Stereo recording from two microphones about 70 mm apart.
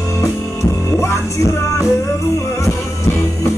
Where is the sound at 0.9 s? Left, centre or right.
Left.